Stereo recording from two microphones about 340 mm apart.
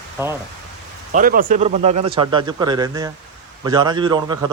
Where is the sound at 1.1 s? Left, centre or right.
Right.